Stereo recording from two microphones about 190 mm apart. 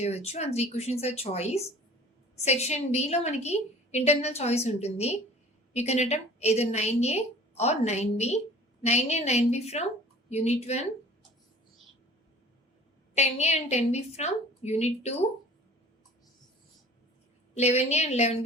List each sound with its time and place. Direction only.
0.0 s a woman's voice: 35° left (ahead or behind)
13.1 s a woman's voice: 35° left (ahead or behind)
17.5 s a woman's voice: 35° left (ahead or behind)